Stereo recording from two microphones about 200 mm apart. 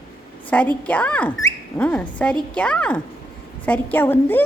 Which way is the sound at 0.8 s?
5° left (ahead or behind).